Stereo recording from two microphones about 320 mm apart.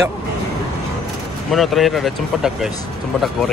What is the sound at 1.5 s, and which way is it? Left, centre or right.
Speech, centre.